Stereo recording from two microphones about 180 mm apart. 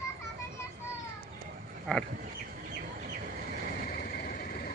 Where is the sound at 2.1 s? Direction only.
55° right (ahead or behind).